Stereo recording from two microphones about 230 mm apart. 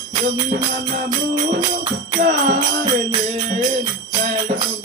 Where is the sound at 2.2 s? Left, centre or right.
Right.